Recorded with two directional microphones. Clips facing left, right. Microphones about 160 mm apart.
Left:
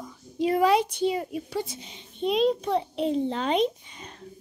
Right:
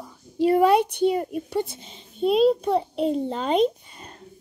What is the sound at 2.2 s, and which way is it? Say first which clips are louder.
A child's voice: right 5 dB; 5° right (ahead or behind).